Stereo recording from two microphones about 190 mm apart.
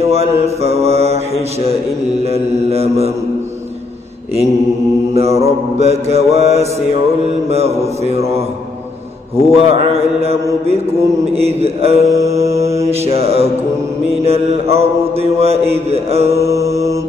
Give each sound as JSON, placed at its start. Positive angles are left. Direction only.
{"t": 0.0, "sound": "mantra", "side_deg": -35}
{"t": 2.2, "sound": "mantra", "side_deg": -30}
{"t": 5.4, "sound": "mantra", "side_deg": -35}
{"t": 9.5, "sound": "mantra", "side_deg": -30}
{"t": 11.3, "sound": "mantra", "side_deg": -30}
{"t": 12.1, "sound": "mantra", "side_deg": -15}
{"t": 12.5, "sound": "mantra", "side_deg": -35}
{"t": 16.5, "sound": "mantra", "side_deg": -15}